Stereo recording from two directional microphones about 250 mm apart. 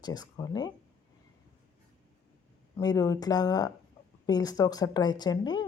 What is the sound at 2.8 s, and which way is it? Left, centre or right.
Speech, centre.